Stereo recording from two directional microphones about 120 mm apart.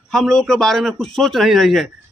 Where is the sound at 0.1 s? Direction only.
5° left (ahead or behind).